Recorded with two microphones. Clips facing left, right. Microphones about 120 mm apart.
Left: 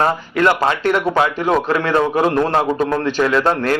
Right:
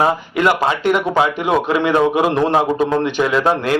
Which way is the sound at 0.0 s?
15° right (ahead or behind).